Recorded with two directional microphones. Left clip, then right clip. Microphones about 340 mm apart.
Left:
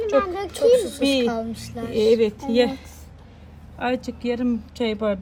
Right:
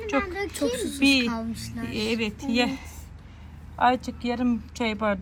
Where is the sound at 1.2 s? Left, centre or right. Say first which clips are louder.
Left 6 dB; left.